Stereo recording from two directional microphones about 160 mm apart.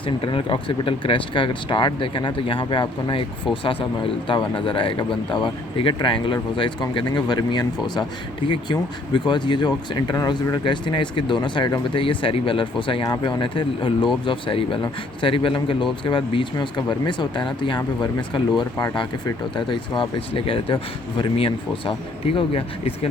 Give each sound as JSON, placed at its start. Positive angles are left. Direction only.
{"t": 0.2, "sound": "speech", "side_deg": 30}